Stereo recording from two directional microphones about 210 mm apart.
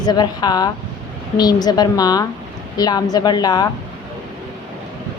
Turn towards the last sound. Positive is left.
turn(degrees=20)  # may be behind; listen again after turning